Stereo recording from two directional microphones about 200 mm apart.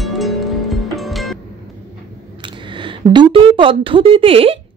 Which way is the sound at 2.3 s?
25° right (ahead or behind).